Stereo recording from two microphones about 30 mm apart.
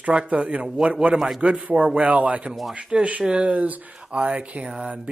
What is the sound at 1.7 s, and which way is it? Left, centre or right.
Speech, right.